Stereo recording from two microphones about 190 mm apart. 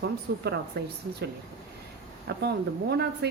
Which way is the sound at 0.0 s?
60° right (ahead or behind).